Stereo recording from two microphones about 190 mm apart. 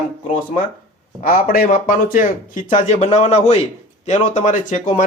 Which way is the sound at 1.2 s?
50° left (ahead or behind).